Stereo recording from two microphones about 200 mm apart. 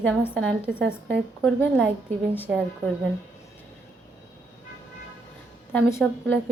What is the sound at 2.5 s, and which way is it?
Speech, 5° right (ahead or behind).